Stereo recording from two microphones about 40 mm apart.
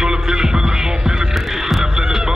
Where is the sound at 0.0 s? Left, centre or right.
Centre.